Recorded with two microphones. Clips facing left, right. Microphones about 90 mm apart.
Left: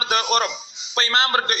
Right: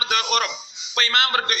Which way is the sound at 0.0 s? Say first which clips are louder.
Left 2 dB; 35° left (ahead or behind).